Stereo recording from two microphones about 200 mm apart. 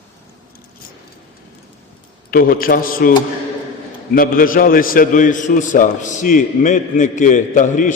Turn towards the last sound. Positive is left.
turn(degrees=40)  # may be behind; listen again after turning